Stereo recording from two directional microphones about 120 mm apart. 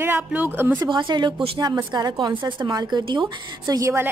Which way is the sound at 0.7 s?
40° right (ahead or behind).